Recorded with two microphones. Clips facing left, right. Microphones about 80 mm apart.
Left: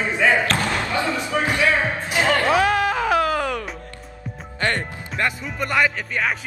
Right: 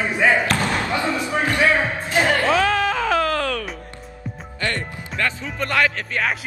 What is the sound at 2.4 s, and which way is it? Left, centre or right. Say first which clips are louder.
Music: even; centre.